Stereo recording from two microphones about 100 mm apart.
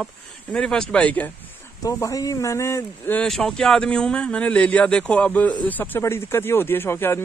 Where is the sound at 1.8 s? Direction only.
35° left (ahead or behind).